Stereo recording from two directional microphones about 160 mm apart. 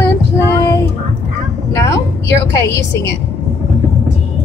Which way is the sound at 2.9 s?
20° left (ahead or behind).